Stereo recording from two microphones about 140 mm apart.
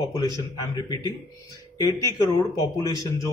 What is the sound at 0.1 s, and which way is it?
Speech, 25° left (ahead or behind).